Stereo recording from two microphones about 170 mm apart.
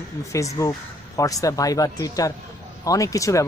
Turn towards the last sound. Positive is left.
turn(degrees=20)  # may be behind; listen again after turning